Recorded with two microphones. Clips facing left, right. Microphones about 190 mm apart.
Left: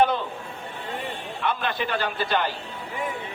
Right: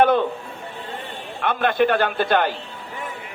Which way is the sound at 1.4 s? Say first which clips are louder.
Right 8 dB; 55° right (ahead or behind).